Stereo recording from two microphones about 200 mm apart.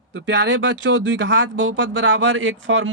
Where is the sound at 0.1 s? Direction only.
65° right (ahead or behind).